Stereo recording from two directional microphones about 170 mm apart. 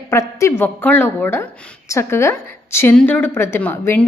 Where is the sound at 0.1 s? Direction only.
15° left (ahead or behind).